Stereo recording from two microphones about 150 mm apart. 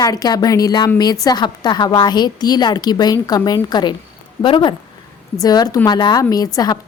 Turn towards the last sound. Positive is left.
turn(degrees=25)  # may be behind; listen again after turning